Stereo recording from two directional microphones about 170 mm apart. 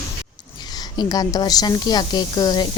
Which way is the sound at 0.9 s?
20° left (ahead or behind).